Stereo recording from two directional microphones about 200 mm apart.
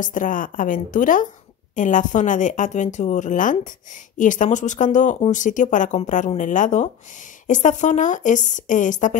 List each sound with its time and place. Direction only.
0.0 s a woman's voice: 40° left (ahead or behind)